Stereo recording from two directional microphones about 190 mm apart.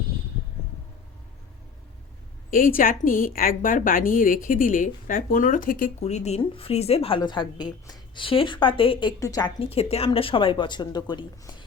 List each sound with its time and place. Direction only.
2.5 s a woman's voice: 45° left (ahead or behind); by 9.5 s 20° left (ahead or behind)
9.6 s speech: 30° left (ahead or behind)